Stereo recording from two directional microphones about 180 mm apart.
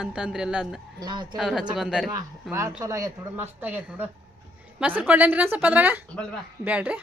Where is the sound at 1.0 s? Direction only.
25° right (ahead or behind).